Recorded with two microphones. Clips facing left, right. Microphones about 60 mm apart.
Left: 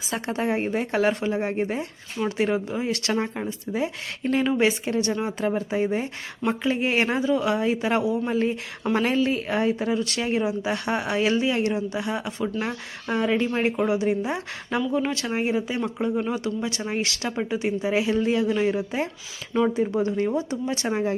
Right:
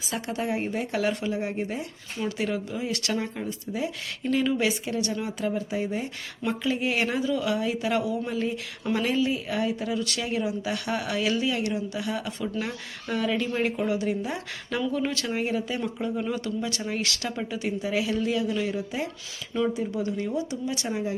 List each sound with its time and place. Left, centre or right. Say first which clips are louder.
0.1 s speech: left 3 dB; left
6.4 s speech: left 3 dB; left
20.8 s speech: left 7 dB; left